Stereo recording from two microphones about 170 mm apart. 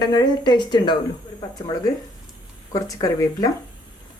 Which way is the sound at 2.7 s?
20° left (ahead or behind).